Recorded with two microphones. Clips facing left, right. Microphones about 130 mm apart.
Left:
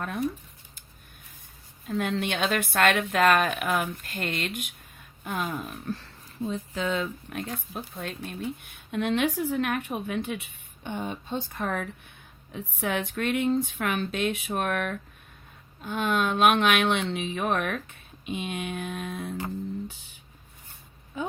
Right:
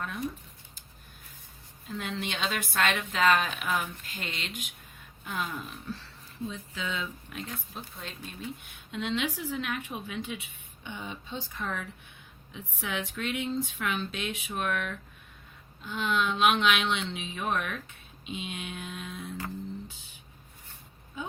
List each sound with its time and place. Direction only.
1.9 s a woman's voice: 55° left (ahead or behind)